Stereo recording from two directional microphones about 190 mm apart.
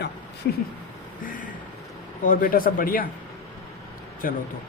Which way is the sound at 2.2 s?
50° left (ahead or behind).